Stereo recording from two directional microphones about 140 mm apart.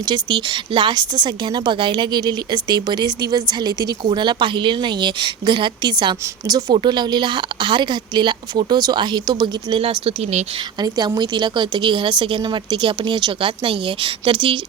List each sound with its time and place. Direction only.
0.0 s a woman's voice: 30° right (ahead or behind)
9.8 s speech: 45° right (ahead or behind)
10.8 s a woman's voice: 30° right (ahead or behind)